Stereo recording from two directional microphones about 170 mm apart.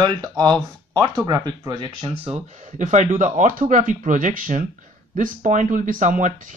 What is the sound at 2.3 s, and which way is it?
Speech, 45° right (ahead or behind).